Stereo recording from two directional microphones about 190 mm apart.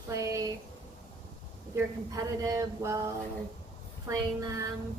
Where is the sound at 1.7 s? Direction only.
15° right (ahead or behind).